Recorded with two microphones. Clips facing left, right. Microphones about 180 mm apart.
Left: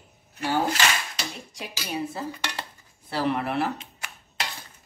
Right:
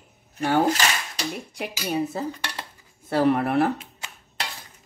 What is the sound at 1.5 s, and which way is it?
Speech, 60° right (ahead or behind).